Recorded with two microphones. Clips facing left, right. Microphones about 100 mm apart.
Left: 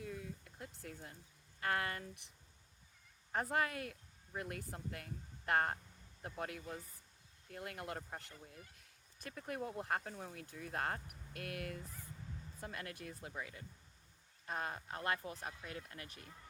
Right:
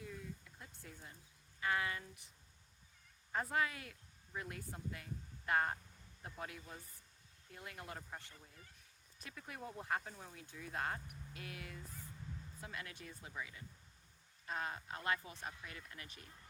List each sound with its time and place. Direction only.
0.0 s a sound: 60° left (ahead or behind)
1.6 s speech: 55° left (ahead or behind)
3.5 s speech: 50° left (ahead or behind)